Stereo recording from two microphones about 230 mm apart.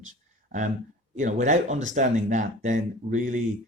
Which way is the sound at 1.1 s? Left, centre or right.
Right.